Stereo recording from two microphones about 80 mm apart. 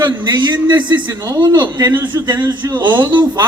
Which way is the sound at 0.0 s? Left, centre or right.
Right.